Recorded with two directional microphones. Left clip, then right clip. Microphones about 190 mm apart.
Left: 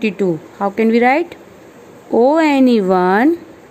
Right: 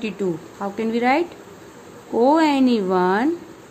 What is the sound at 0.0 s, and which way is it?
A woman's voice, 45° left (ahead or behind).